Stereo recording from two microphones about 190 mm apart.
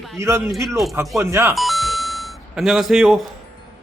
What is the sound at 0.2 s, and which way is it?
A man's voice, 15° right (ahead or behind).